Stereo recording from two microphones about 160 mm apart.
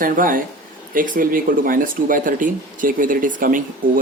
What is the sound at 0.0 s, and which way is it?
Speech, 60° right (ahead or behind).